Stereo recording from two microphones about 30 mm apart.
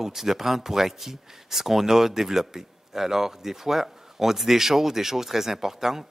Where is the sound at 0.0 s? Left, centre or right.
Centre.